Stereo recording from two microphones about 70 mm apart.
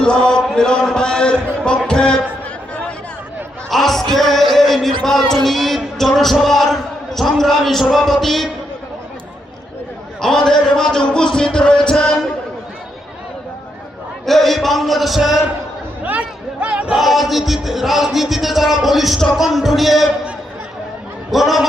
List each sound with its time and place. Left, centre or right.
0.0 s speech: centre
3.7 s music: centre
10.2 s speech: centre
14.3 s music: centre
16.0 s speech: centre
16.9 s music: centre
21.2 s a man's voice: centre